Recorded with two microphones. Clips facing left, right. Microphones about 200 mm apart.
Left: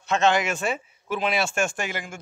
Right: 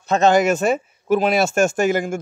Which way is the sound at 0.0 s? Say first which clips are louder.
Right 7 dB; 40° right (ahead or behind).